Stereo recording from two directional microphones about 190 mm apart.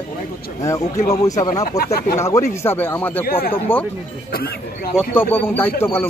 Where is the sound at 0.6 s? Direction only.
15° left (ahead or behind).